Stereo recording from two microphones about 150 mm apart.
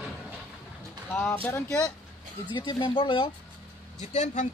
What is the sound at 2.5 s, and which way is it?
Speech, 30° left (ahead or behind).